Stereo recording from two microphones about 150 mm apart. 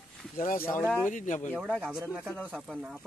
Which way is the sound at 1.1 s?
60° left (ahead or behind).